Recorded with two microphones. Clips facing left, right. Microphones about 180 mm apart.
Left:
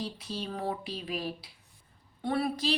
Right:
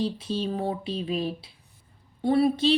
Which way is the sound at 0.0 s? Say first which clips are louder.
Right 9 dB; 25° right (ahead or behind).